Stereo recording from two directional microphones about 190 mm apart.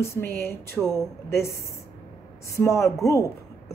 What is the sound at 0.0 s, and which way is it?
Speech, 15° left (ahead or behind).